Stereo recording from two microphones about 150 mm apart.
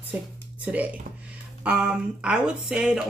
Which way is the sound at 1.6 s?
5° right (ahead or behind).